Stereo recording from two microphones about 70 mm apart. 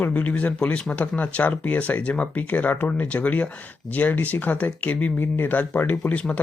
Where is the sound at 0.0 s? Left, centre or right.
Left.